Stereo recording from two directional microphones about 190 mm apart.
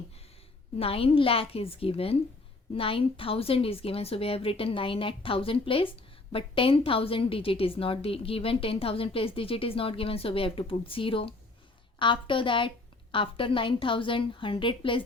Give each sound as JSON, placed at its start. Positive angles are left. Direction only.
{"t": 0.8, "sound": "a woman's voice", "side_deg": 30}